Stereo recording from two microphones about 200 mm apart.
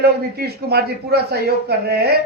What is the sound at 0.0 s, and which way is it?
A man's voice, 50° right (ahead or behind).